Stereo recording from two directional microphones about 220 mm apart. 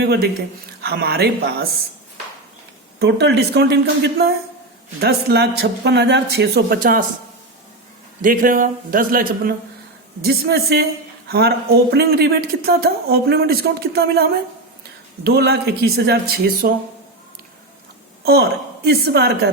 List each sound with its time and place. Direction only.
0.8 s speech: 45° right (ahead or behind)
3.0 s speech: 50° right (ahead or behind)
8.2 s a man's voice: 40° right (ahead or behind)
18.9 s speech: 45° right (ahead or behind)